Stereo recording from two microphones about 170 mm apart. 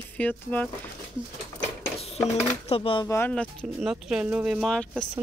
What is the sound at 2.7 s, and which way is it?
Speech, 30° left (ahead or behind).